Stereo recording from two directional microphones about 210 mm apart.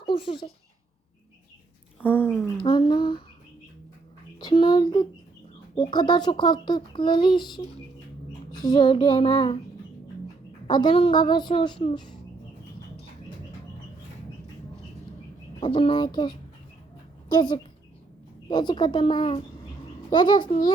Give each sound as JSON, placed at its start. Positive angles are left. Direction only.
{"t": 0.0, "sound": "speech", "side_deg": 25}
{"t": 2.0, "sound": "speech", "side_deg": -5}
{"t": 2.6, "sound": "a child's voice", "side_deg": 20}
{"t": 4.4, "sound": "a child's voice", "side_deg": 20}
{"t": 10.7, "sound": "a child's voice", "side_deg": 20}
{"t": 15.6, "sound": "a child's voice", "side_deg": 25}